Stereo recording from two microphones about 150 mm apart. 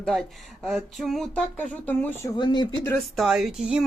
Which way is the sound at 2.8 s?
Centre (ahead or behind).